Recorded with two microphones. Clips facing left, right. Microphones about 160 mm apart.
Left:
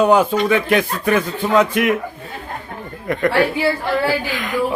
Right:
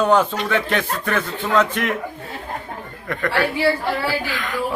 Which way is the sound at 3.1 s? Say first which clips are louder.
Left 6 dB; 15° left (ahead or behind).